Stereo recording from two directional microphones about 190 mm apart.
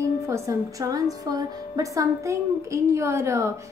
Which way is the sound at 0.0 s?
15° right (ahead or behind).